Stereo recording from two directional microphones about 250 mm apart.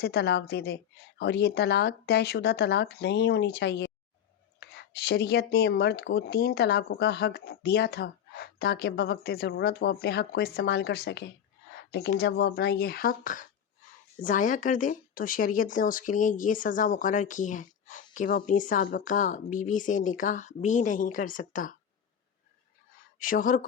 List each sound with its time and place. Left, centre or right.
0.0 s speech: left
23.2 s speech: left